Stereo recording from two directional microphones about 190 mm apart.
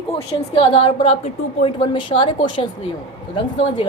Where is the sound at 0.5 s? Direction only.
25° left (ahead or behind).